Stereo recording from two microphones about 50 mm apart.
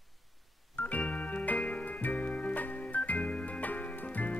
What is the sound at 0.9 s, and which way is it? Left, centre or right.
Music, left.